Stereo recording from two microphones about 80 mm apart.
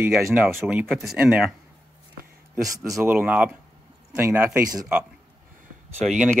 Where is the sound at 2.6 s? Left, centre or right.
Right.